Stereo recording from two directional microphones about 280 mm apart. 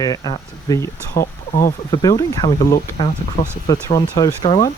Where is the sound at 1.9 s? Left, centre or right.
Centre.